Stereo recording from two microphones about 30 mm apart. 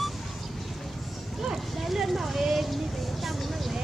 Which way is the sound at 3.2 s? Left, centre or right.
Centre.